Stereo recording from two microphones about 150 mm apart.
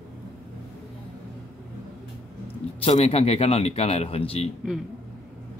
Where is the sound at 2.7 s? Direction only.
45° left (ahead or behind).